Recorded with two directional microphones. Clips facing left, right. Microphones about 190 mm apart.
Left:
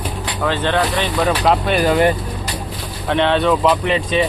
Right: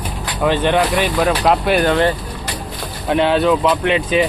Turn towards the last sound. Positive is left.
turn(degrees=-5)  # may be behind; listen again after turning